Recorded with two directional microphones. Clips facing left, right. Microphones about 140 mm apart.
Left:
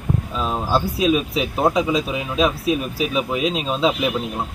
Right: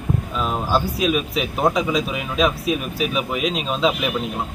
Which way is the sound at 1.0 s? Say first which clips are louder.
Left 2 dB; 30° left (ahead or behind).